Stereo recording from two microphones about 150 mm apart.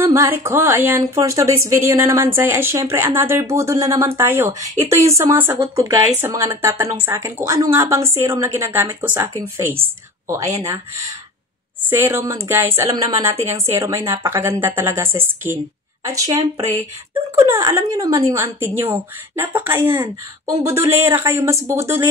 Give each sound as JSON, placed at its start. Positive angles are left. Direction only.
{"t": 0.0, "sound": "a woman's voice", "side_deg": -15}
{"t": 5.6, "sound": "a woman's voice", "side_deg": -25}